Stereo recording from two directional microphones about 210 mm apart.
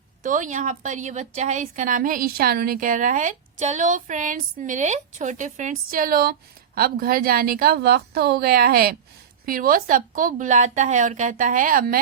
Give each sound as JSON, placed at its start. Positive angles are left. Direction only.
{"t": 0.2, "sound": "a woman's voice", "side_deg": -35}